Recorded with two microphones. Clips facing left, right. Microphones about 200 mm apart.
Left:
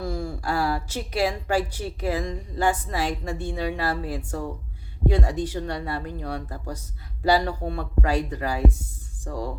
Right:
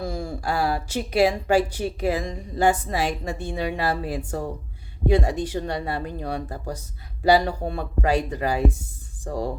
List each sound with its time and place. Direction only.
0.0 s speech: 15° right (ahead or behind)